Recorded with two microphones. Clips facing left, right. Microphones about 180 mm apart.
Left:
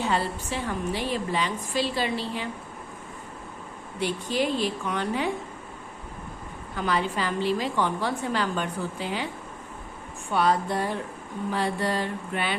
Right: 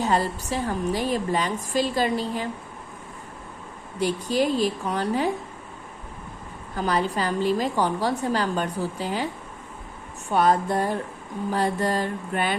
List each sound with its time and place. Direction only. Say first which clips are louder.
0.0 s a woman's voice: right 3 dB; 40° right (ahead or behind)
4.0 s a woman's voice: right 4 dB; 40° right (ahead or behind)
6.7 s a woman's voice: right 2 dB; 40° right (ahead or behind)